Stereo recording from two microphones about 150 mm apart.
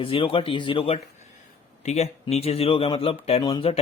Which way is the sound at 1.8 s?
50° left (ahead or behind).